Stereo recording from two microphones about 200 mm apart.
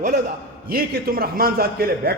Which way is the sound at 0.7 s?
50° right (ahead or behind).